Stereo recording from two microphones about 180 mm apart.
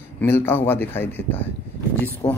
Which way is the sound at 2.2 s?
20° left (ahead or behind).